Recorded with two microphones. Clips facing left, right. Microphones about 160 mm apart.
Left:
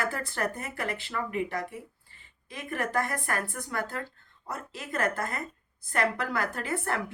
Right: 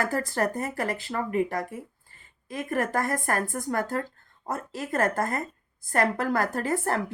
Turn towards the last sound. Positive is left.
turn(degrees=-40)  # may be behind; listen again after turning